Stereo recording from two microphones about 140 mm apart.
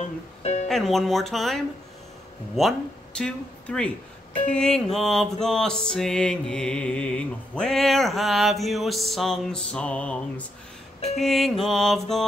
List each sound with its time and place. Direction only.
0.4 s music: 50° left (ahead or behind)
0.7 s music: centre (ahead or behind)
2.5 s speech: 5° left (ahead or behind)
4.5 s music: 5° left (ahead or behind)